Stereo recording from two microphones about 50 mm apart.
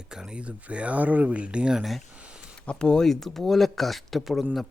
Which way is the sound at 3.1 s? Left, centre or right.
Centre.